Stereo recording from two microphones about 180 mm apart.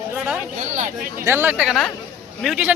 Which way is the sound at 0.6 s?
45° right (ahead or behind).